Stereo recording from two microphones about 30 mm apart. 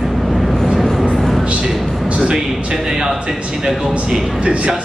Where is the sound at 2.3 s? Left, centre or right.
Centre.